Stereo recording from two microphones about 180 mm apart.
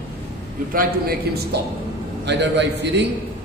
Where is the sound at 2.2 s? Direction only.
75° right (ahead or behind).